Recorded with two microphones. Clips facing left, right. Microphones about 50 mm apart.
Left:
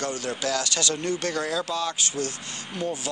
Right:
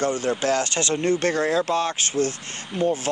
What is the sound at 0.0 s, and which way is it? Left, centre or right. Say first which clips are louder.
Speech: right 6 dB; right.